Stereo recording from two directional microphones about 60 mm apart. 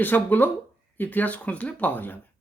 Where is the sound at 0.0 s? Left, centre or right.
Left.